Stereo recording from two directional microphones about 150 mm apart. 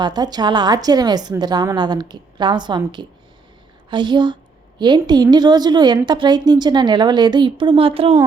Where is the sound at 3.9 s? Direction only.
30° right (ahead or behind).